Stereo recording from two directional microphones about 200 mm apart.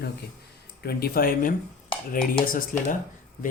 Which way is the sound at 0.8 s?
50° left (ahead or behind).